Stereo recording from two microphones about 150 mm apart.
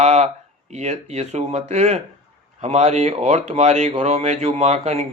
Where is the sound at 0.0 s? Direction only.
45° right (ahead or behind).